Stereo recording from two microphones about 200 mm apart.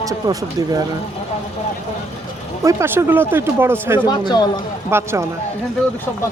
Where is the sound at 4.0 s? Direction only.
20° left (ahead or behind).